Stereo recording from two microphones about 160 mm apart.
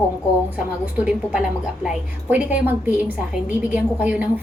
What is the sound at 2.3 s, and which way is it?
A woman's voice, 10° right (ahead or behind).